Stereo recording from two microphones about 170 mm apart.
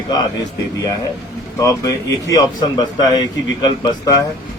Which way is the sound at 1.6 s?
20° left (ahead or behind).